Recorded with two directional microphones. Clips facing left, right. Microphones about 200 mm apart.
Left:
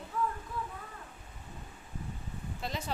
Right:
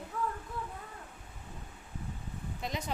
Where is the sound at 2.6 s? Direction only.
15° right (ahead or behind).